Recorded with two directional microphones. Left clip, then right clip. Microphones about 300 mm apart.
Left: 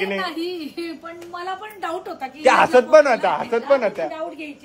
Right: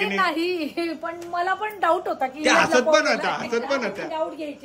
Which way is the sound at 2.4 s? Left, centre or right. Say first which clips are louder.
Left 4 dB; centre.